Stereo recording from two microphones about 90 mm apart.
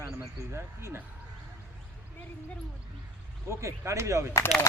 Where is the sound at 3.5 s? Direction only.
30° right (ahead or behind).